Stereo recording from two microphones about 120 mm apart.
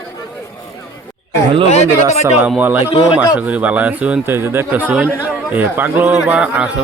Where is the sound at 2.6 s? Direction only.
15° right (ahead or behind).